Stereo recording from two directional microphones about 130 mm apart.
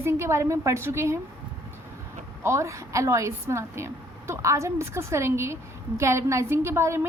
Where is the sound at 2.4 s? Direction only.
20° right (ahead or behind).